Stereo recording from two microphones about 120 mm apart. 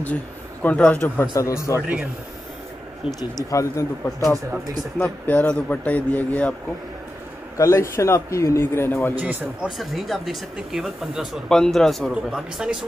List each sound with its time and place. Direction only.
0.0 s speech: 15° left (ahead or behind)
1.2 s a man's voice: 30° left (ahead or behind)
1.8 s speech: 10° right (ahead or behind)
3.4 s a man's voice: 25° left (ahead or behind)
4.9 s a man's voice: 10° left (ahead or behind)
7.5 s a man's voice: 25° left (ahead or behind)
9.2 s speech: 10° right (ahead or behind)